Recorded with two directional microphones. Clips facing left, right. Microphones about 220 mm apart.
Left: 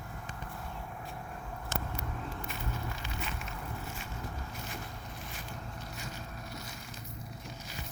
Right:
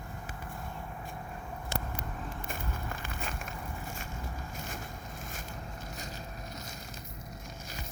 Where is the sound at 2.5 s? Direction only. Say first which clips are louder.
Even; 50° right (ahead or behind).